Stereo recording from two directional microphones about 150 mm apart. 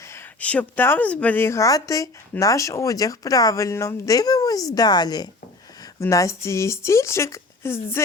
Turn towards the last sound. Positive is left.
turn(degrees=15)  # may be behind; listen again after turning